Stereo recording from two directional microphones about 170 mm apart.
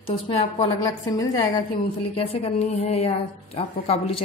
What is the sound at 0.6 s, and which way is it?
Speech, 25° left (ahead or behind).